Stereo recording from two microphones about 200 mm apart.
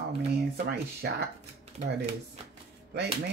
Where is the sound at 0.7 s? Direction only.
55° right (ahead or behind).